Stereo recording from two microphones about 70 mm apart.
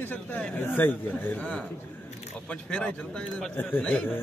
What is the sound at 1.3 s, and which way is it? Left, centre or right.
Speech, centre.